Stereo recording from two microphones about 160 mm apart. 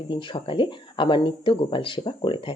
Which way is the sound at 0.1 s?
30° left (ahead or behind).